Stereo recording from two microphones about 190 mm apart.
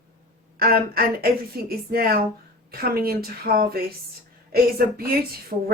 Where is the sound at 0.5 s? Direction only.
50° right (ahead or behind).